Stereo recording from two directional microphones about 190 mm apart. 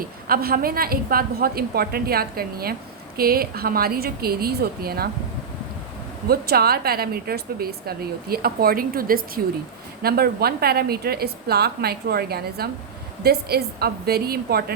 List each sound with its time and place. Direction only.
0.3 s a woman's voice: 50° right (ahead or behind)
6.2 s a woman's voice: 55° right (ahead or behind)